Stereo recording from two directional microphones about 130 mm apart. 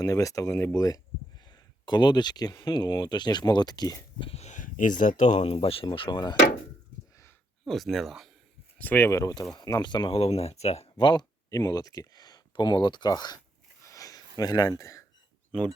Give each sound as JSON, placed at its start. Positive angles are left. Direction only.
{"t": 0.0, "sound": "speech", "side_deg": 25}
{"t": 4.2, "sound": "speech", "side_deg": 50}
{"t": 7.6, "sound": "speech", "side_deg": 0}
{"t": 8.8, "sound": "speech", "side_deg": 15}
{"t": 10.9, "sound": "speech", "side_deg": 35}
{"t": 13.8, "sound": "a sound", "side_deg": 25}